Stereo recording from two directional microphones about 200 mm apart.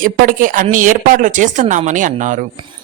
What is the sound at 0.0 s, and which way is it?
A man's voice, 45° right (ahead or behind).